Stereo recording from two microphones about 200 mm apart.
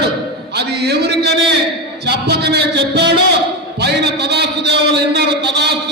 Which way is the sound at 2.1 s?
55° right (ahead or behind).